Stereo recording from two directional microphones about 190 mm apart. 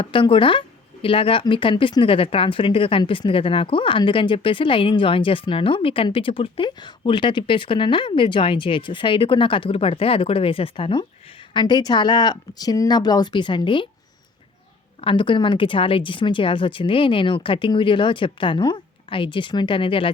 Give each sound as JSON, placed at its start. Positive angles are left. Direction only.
{"t": 0.0, "sound": "speech", "side_deg": 25}
{"t": 15.0, "sound": "speech", "side_deg": 25}